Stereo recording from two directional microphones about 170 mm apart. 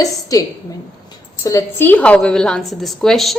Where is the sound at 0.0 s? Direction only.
20° left (ahead or behind).